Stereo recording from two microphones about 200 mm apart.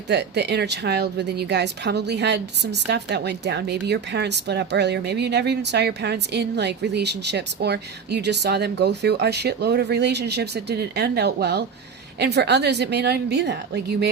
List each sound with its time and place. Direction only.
0.1 s speech: 60° right (ahead or behind)